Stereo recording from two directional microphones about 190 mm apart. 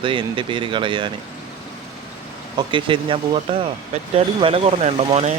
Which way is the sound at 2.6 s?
25° right (ahead or behind).